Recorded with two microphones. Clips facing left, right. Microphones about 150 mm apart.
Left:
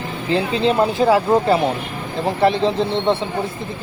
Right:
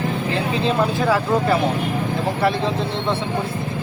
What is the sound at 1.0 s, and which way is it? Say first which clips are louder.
Speech: left 6 dB; 25° left (ahead or behind).